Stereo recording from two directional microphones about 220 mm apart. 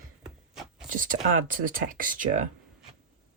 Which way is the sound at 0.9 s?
35° right (ahead or behind).